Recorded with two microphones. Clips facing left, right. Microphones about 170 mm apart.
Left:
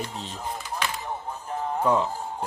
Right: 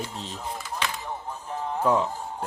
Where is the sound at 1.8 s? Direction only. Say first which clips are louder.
Even; centre (ahead or behind).